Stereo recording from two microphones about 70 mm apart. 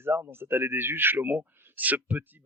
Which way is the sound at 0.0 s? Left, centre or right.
Right.